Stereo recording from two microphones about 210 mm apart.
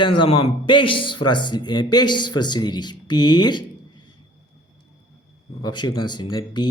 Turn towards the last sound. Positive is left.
turn(degrees=20)  # may be behind; listen again after turning